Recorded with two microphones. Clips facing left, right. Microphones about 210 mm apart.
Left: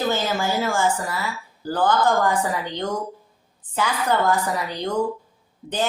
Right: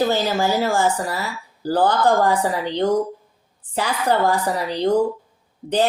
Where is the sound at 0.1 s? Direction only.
35° right (ahead or behind).